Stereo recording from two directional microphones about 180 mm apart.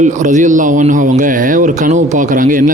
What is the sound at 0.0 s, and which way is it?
A man's voice, 45° right (ahead or behind).